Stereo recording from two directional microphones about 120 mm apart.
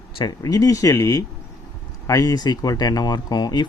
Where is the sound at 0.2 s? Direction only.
30° left (ahead or behind).